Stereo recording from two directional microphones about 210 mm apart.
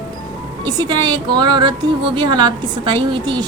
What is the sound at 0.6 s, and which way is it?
A woman's voice, 20° right (ahead or behind).